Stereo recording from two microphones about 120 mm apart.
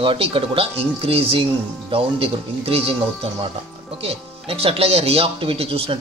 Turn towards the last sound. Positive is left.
turn(degrees=-50)  # may be behind; listen again after turning